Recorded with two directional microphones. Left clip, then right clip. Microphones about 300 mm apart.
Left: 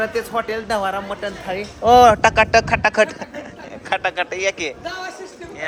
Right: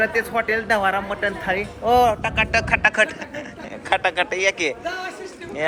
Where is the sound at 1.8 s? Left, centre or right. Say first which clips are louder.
Left 7 dB; left.